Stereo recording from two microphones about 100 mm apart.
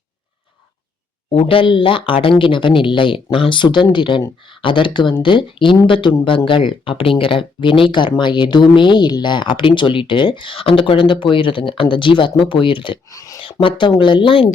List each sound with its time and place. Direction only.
1.3 s speech: 65° left (ahead or behind)
13.1 s speech: 35° left (ahead or behind)
13.4 s speech: 60° left (ahead or behind)